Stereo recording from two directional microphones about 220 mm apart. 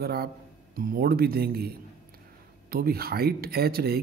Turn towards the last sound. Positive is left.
turn(degrees=-45)  # may be behind; listen again after turning